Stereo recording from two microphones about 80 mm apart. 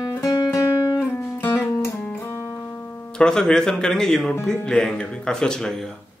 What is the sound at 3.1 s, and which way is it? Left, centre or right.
Speech, centre.